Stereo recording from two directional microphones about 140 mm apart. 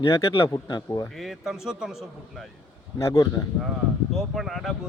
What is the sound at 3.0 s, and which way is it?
Speech, 20° left (ahead or behind).